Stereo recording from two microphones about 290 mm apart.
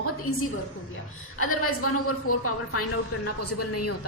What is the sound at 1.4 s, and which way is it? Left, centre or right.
A woman's voice, left.